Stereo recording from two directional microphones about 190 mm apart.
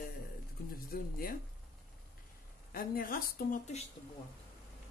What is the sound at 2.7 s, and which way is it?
Speech, 50° left (ahead or behind).